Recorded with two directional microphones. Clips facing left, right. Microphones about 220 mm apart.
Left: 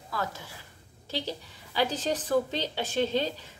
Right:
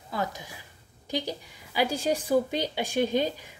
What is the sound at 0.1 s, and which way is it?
A woman's voice, 15° right (ahead or behind).